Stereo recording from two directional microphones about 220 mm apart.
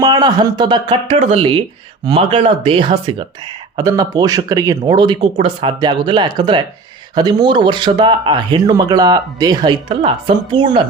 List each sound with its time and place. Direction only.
0.0 s speech: 20° right (ahead or behind)